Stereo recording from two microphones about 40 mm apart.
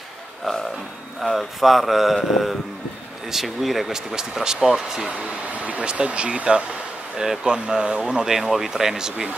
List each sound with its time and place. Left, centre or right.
0.5 s speech: centre
1.2 s speech: centre
5.5 s speech: right
5.9 s speech: right
8.4 s speech: centre